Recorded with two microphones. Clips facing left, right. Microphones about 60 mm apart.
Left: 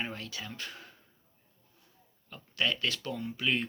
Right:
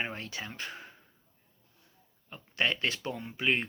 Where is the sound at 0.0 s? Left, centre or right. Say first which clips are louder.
Right 2 dB; right.